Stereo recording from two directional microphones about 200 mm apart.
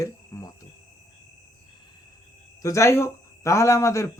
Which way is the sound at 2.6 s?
15° left (ahead or behind).